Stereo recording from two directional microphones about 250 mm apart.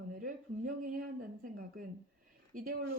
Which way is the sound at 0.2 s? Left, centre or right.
Right.